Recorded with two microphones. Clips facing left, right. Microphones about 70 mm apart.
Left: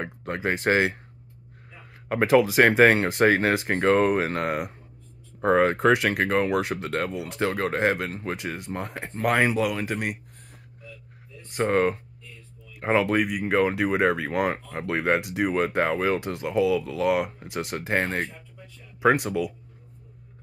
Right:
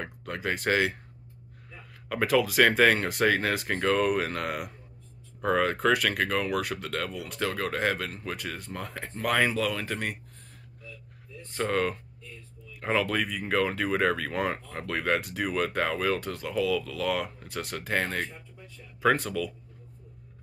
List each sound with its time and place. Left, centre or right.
0.0 s speech: left
2.0 s speech: left
8.4 s speech: centre
11.5 s speech: left
18.9 s speech: centre